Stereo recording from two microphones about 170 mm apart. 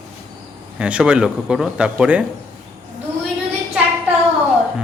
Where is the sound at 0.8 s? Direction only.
5° right (ahead or behind).